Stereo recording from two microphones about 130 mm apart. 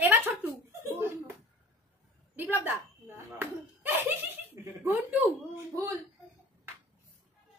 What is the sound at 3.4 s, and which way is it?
Laughter, 15° right (ahead or behind).